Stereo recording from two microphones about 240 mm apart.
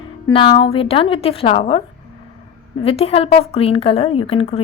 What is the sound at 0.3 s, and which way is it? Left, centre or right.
A woman's voice, left.